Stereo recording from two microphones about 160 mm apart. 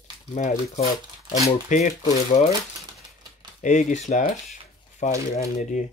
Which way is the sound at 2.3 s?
45° left (ahead or behind).